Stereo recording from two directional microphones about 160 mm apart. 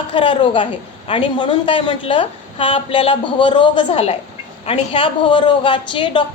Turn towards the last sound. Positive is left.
turn(degrees=30)  # may be behind; listen again after turning